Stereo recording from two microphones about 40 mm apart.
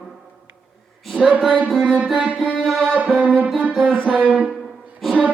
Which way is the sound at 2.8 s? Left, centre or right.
Right.